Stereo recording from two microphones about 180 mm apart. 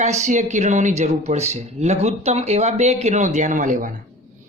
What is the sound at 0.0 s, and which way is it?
Speech, 40° right (ahead or behind).